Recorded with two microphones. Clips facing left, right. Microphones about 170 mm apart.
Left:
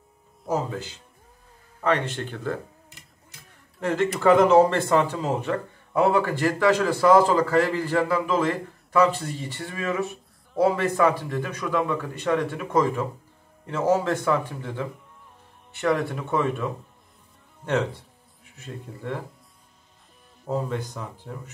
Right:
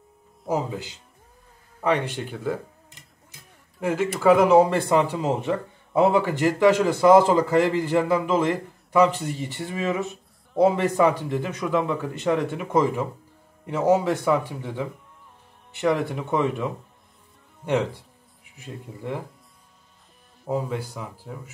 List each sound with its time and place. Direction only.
0.5 s speech: 15° right (ahead or behind)
1.8 s tick-tock: 15° right (ahead or behind)
3.8 s speech: 10° right (ahead or behind)
18.6 s speech: 10° right (ahead or behind)
20.4 s speech: 10° right (ahead or behind)